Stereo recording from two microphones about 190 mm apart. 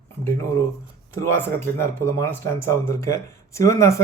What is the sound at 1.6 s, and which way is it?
Speech, 15° left (ahead or behind).